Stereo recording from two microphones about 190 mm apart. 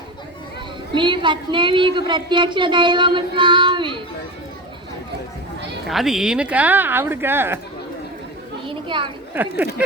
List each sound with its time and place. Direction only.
0.9 s child singing: 25° right (ahead or behind)
5.9 s speech: centre (ahead or behind)
8.6 s child singing: 25° right (ahead or behind)
9.3 s speech: 10° right (ahead or behind)